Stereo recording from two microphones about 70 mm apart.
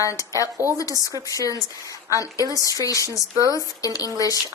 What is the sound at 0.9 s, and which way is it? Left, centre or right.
Speech, right.